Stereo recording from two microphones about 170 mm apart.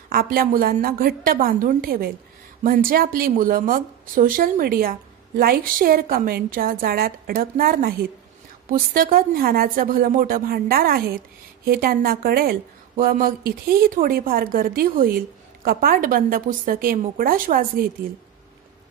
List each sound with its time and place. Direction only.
0.1 s a woman's voice: 60° right (ahead or behind)